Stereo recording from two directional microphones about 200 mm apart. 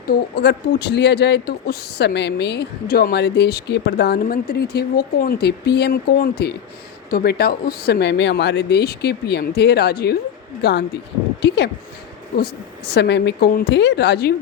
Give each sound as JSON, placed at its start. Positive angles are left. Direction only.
{"t": 0.1, "sound": "speech", "side_deg": 55}